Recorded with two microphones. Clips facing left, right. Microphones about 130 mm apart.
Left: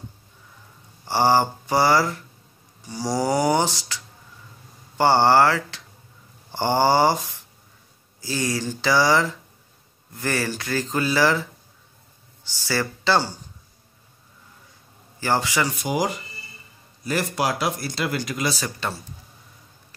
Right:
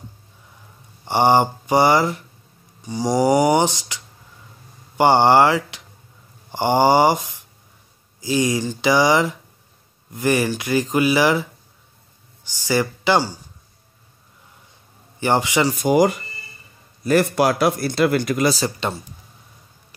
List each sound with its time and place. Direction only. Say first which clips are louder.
1.0 s speech: right 3 dB; 20° right (ahead or behind)
12.4 s speech: right 5 dB; 15° right (ahead or behind)
15.1 s speech: right 4 dB; 20° right (ahead or behind)
15.8 s speech: right 8 dB; 50° right (ahead or behind)
18.8 s speech: right 2 dB; 20° right (ahead or behind)